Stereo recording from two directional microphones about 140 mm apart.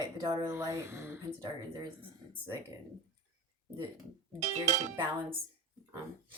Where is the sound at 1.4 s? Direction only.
35° right (ahead or behind).